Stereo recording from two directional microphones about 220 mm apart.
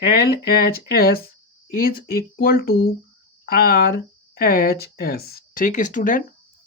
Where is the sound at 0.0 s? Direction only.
45° left (ahead or behind).